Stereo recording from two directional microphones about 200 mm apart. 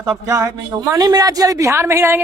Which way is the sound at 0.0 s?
15° right (ahead or behind).